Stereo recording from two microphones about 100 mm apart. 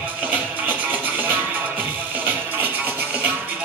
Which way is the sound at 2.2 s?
20° right (ahead or behind).